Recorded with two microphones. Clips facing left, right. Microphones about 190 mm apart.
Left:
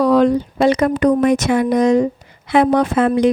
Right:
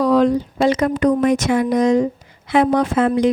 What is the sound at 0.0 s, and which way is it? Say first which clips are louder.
A woman's voice: left 2 dB; 65° left (ahead or behind).